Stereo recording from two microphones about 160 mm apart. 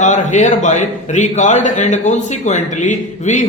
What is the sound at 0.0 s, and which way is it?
A man's voice, 50° left (ahead or behind).